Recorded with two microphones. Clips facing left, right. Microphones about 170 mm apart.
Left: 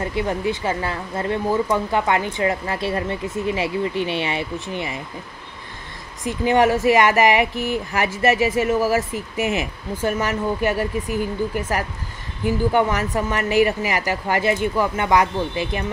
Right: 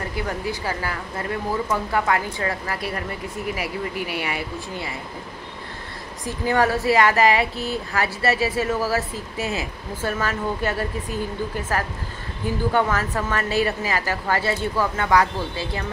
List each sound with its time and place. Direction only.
0.0 s speech: 25° left (ahead or behind)
6.2 s speech: 20° left (ahead or behind)